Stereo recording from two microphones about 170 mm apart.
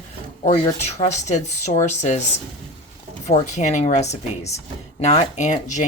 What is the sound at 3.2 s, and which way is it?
A woman's voice, 40° left (ahead or behind).